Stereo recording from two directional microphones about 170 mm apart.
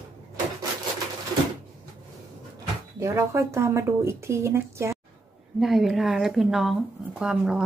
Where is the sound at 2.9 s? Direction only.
15° right (ahead or behind).